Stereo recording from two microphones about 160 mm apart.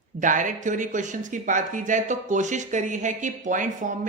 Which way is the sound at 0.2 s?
55° right (ahead or behind).